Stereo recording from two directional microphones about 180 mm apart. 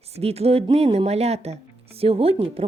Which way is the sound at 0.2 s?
35° right (ahead or behind).